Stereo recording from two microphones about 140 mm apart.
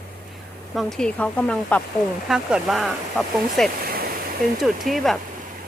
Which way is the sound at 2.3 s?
Centre (ahead or behind).